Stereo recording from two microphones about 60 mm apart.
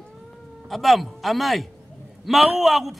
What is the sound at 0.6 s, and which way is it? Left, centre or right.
A man's voice, centre.